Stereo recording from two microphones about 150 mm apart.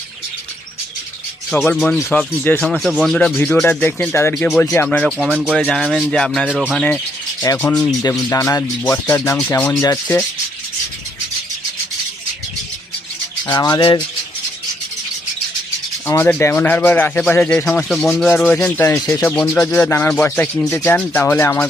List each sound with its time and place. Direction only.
1.6 s speech: 10° left (ahead or behind)
6.5 s speech: 5° right (ahead or behind)
7.4 s rub: 20° left (ahead or behind)
9.0 s speech: 20° left (ahead or behind)
9.8 s rub: 20° left (ahead or behind)
13.5 s rub: 25° left (ahead or behind)
16.0 s speech: 15° left (ahead or behind)